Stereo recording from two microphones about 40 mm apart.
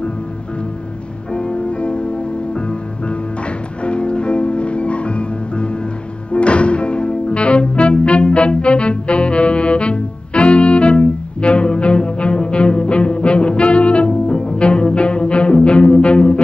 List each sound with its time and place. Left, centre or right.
1.3 s music: left